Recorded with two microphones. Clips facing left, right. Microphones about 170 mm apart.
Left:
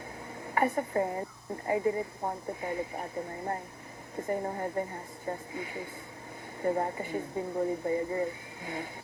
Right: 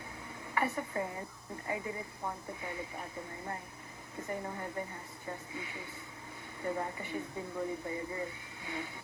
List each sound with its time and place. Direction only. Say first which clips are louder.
0.5 s speech: left 6 dB; 40° left (ahead or behind)